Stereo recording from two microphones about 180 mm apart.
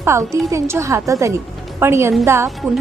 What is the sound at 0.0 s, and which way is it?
A woman's voice, 15° right (ahead or behind).